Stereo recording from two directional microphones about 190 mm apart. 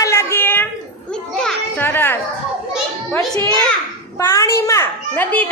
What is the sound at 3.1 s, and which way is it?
A man's voice, 15° left (ahead or behind).